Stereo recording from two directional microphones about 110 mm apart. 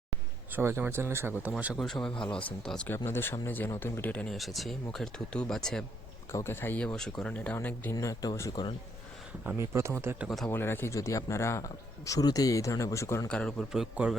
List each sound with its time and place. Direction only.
0.5 s speech: 20° right (ahead or behind)
1.8 s speech: 5° left (ahead or behind)
4.4 s speech: centre (ahead or behind)
6.3 s speech: 20° left (ahead or behind)
6.8 s speech: 5° left (ahead or behind)
7.9 s speech: 35° left (ahead or behind)
9.6 s speech: 25° right (ahead or behind)
10.2 s speech: centre (ahead or behind)
10.5 s speech: 20° left (ahead or behind)
13.2 s speech: 10° left (ahead or behind)
13.7 s speech: 5° right (ahead or behind)